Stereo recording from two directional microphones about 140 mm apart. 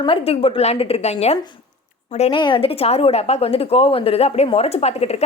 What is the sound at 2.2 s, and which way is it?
Speech, 35° left (ahead or behind).